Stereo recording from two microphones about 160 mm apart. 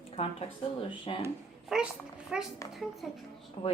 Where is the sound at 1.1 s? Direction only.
35° left (ahead or behind).